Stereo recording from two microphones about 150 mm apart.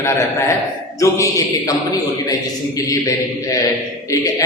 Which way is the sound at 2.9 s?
20° left (ahead or behind).